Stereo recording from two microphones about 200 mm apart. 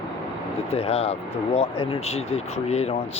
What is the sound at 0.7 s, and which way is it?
Speech, 30° left (ahead or behind).